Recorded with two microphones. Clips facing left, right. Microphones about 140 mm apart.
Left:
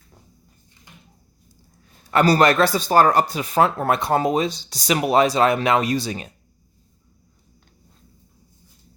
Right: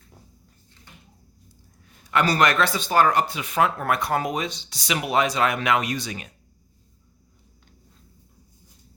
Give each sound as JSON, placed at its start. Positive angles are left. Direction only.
{"t": 2.0, "sound": "speech", "side_deg": 35}